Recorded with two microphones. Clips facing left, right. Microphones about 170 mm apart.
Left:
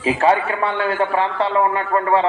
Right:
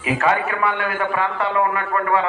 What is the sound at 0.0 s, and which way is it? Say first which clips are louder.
A man's voice: left 3 dB; 30° left (ahead or behind).